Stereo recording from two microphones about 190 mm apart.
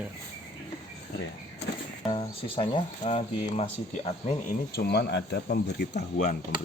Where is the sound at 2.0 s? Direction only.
30° left (ahead or behind).